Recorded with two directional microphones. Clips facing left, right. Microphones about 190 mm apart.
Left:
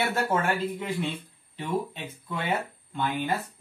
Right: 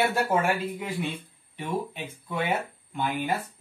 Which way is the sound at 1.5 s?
10° right (ahead or behind).